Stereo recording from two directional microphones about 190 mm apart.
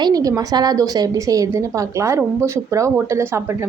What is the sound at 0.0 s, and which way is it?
A woman's voice, 20° right (ahead or behind).